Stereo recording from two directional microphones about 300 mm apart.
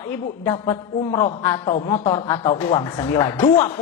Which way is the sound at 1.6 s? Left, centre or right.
Centre.